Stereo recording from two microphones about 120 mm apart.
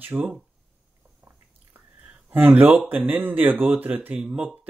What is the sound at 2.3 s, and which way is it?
Speech, 15° right (ahead or behind).